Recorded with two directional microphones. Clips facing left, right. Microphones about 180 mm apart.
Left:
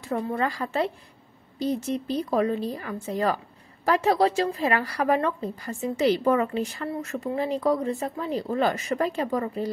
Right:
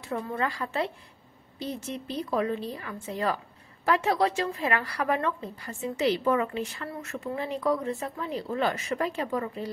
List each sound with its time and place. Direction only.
0.1 s a woman's voice: 40° left (ahead or behind)